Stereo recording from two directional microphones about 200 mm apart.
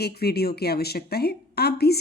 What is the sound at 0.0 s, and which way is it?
A woman's voice, 50° left (ahead or behind).